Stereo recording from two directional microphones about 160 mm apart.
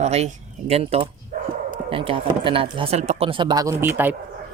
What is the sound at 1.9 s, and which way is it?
Speech, 35° right (ahead or behind).